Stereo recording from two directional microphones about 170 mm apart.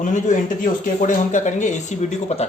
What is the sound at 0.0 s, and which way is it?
Speech, 50° left (ahead or behind).